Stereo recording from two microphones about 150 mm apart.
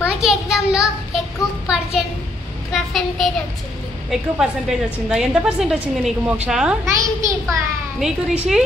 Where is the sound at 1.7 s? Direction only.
5° right (ahead or behind).